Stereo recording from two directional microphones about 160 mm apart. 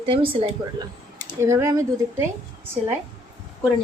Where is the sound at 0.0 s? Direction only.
35° right (ahead or behind).